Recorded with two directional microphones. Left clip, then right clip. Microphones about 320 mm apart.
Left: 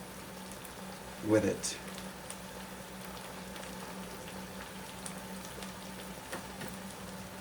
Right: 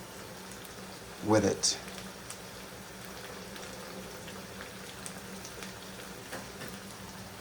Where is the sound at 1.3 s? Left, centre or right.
Centre.